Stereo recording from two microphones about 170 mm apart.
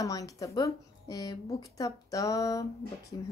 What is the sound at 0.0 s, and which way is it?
Speech, 20° left (ahead or behind).